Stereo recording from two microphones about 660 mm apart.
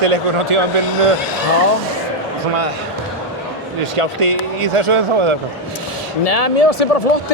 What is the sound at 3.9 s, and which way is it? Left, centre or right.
Speech, right.